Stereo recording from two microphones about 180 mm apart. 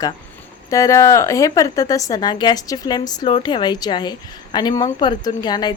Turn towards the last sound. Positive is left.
turn(degrees=25)  # may be behind; listen again after turning